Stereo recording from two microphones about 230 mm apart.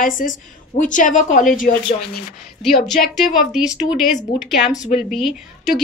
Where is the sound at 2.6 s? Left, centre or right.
Centre.